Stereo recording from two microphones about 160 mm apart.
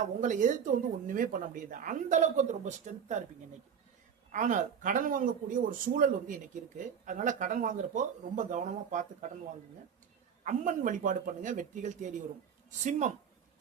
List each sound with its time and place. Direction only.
0.0 s speech: 50° right (ahead or behind)
4.3 s speech: 50° right (ahead or behind)
10.4 s speech: 50° right (ahead or behind)